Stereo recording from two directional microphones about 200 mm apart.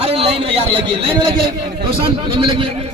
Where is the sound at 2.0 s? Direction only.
25° right (ahead or behind).